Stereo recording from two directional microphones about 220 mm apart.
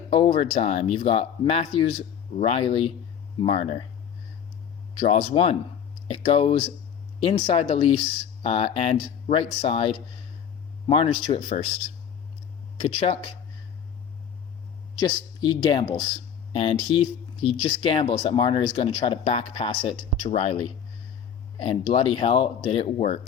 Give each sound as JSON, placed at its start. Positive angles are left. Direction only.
{"t": 0.1, "sound": "speech", "side_deg": 25}
{"t": 4.9, "sound": "speech", "side_deg": 25}
{"t": 12.7, "sound": "speech", "side_deg": 25}
{"t": 14.9, "sound": "speech", "side_deg": 20}